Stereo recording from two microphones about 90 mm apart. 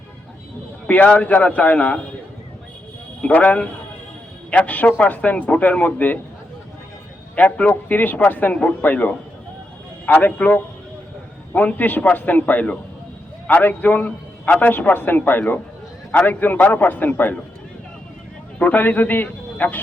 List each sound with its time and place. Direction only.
0.9 s a man's voice: 15° left (ahead or behind)
3.2 s a man's voice: 15° left (ahead or behind)
7.3 s a man's voice: 15° left (ahead or behind)
18.6 s a man's voice: 20° left (ahead or behind)